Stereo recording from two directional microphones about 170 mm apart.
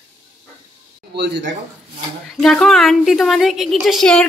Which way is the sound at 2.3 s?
5° left (ahead or behind).